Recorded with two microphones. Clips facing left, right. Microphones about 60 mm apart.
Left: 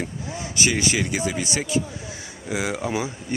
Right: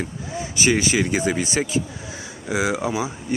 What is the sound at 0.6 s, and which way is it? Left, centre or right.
Speech, right.